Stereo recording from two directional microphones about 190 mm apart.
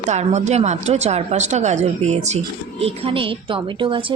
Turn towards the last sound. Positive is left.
turn(degrees=-25)  # may be behind; listen again after turning